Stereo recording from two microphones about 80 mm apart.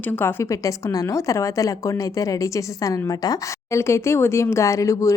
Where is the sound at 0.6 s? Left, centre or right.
Left.